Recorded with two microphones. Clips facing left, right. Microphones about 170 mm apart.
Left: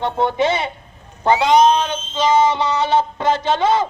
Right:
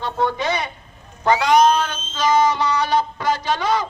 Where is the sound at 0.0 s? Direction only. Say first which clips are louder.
Left 4 dB; 25° left (ahead or behind).